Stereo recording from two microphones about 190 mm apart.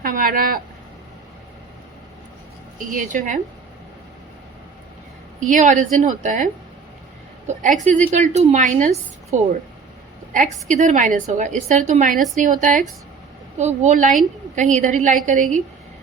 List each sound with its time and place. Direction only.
0.0 s speech: 45° right (ahead or behind)
2.7 s a woman's voice: 45° right (ahead or behind)
5.4 s a woman's voice: 40° right (ahead or behind)